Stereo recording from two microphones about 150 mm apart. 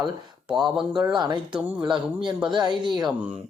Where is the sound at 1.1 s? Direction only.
30° right (ahead or behind).